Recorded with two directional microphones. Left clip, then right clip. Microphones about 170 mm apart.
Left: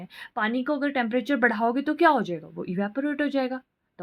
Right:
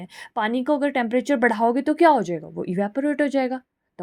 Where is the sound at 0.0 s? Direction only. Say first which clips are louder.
Right 3 dB; 40° right (ahead or behind).